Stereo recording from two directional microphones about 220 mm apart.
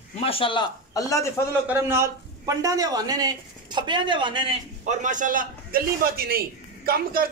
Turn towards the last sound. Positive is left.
turn(degrees=-45)  # may be behind; listen again after turning